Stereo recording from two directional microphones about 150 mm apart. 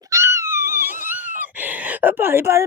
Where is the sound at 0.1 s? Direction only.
20° right (ahead or behind).